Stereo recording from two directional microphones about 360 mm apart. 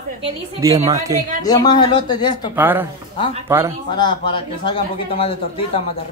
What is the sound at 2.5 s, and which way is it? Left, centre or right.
Speech, centre.